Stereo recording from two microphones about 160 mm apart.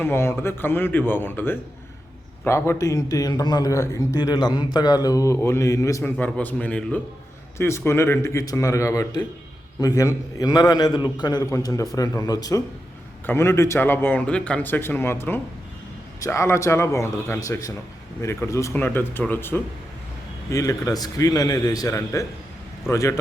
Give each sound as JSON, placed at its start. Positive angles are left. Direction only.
{"t": 0.0, "sound": "a man's voice", "side_deg": 15}